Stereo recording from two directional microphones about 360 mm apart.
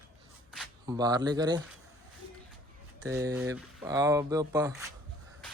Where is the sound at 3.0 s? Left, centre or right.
Centre.